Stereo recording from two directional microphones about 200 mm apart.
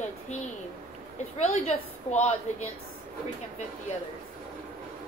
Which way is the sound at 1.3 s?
35° left (ahead or behind).